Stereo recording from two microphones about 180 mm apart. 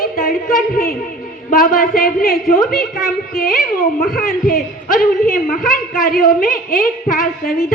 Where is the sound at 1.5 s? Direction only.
50° left (ahead or behind).